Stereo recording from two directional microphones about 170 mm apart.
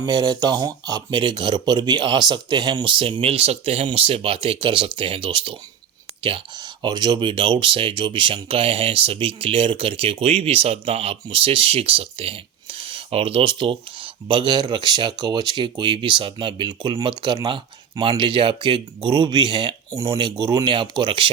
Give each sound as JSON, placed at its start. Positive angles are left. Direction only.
{"t": 0.0, "sound": "speech", "side_deg": -25}